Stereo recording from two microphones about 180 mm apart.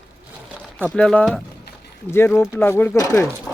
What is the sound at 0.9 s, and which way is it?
Speech, 5° left (ahead or behind).